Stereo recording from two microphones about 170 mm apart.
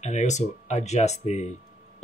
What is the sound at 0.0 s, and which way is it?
Speech, 45° left (ahead or behind).